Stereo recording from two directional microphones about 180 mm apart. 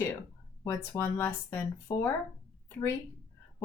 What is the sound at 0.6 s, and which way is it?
Speech, 15° left (ahead or behind).